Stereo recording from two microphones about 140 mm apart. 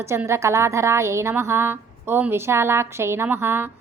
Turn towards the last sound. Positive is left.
turn(degrees=-15)  # may be behind; listen again after turning